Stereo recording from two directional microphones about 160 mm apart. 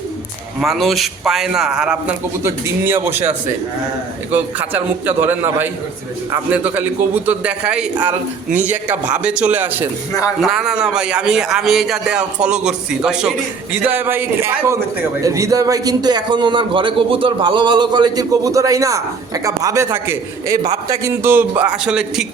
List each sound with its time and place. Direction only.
0.6 s a man's voice: centre (ahead or behind)
4.3 s a man's voice: 10° right (ahead or behind)
10.1 s speech: 20° left (ahead or behind)
10.4 s a man's voice: 5° right (ahead or behind)